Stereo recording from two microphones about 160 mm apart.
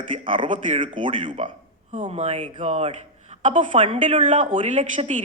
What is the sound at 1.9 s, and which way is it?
Speech, 50° right (ahead or behind).